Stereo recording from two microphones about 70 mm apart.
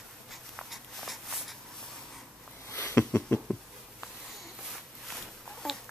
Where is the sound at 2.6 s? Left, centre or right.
Left.